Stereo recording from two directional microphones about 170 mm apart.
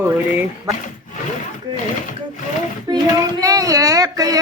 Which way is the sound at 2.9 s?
25° right (ahead or behind).